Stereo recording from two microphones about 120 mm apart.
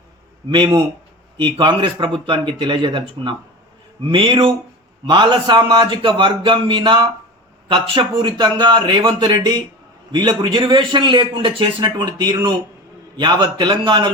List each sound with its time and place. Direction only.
0.5 s a man's voice: 40° right (ahead or behind)